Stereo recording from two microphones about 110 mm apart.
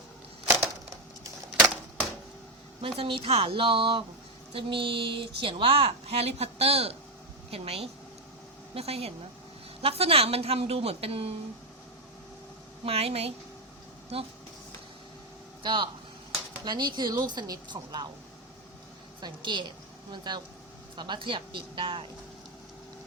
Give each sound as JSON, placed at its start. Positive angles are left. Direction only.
{"t": 2.8, "sound": "a woman's voice", "side_deg": -55}
{"t": 12.8, "sound": "a woman's voice", "side_deg": -65}
{"t": 15.6, "sound": "a woman's voice", "side_deg": -45}
{"t": 19.2, "sound": "speech", "side_deg": -45}